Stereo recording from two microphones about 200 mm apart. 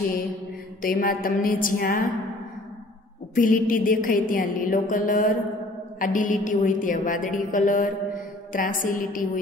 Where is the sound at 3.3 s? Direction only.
45° left (ahead or behind).